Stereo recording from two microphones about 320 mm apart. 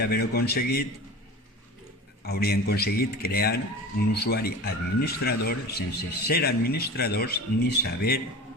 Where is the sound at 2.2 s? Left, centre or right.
Left.